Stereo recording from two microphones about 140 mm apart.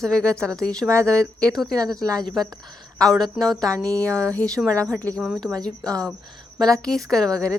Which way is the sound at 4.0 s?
10° left (ahead or behind).